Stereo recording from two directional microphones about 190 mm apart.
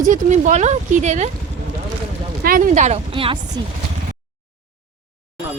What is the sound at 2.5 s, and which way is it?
Speech, 45° right (ahead or behind).